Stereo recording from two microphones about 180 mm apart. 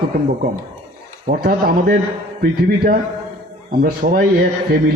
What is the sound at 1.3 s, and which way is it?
A man's voice, 55° right (ahead or behind).